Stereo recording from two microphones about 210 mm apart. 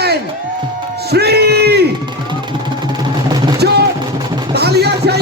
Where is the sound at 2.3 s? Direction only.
20° right (ahead or behind).